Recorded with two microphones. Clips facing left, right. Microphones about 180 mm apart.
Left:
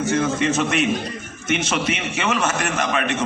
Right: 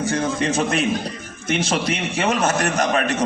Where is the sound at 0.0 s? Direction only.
35° right (ahead or behind).